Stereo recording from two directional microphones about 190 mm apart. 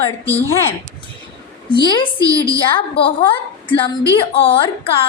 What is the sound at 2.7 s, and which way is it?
A woman's voice, 30° left (ahead or behind).